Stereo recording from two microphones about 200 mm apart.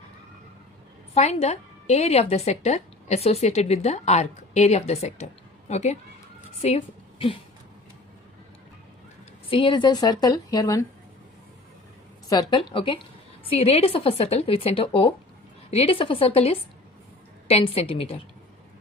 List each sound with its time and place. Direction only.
1.1 s a woman's voice: 30° left (ahead or behind)
9.5 s a woman's voice: 25° left (ahead or behind)
12.3 s a woman's voice: 20° left (ahead or behind)